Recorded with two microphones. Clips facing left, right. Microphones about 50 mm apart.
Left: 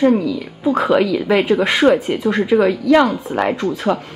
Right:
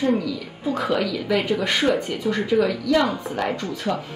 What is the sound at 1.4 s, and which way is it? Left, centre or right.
Speech, left.